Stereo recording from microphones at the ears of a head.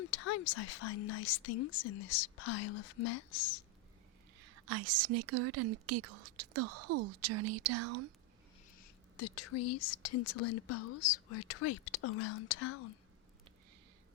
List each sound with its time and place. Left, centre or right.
0.0 s speech: left
4.4 s speech: right
8.8 s speech: left